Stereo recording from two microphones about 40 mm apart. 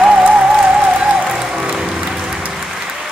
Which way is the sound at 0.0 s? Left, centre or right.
Right.